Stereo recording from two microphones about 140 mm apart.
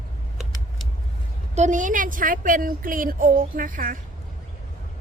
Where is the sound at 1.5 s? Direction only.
60° right (ahead or behind); by 4.0 s 75° right (ahead or behind).